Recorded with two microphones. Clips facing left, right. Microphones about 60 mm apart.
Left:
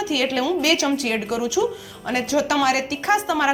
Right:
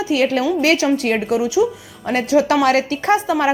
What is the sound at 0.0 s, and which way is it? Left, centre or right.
A woman's voice, right.